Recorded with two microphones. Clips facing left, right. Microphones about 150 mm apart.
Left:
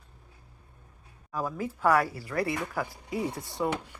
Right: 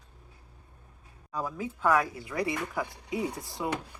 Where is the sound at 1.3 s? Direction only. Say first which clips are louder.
Left 2 dB; 10° left (ahead or behind).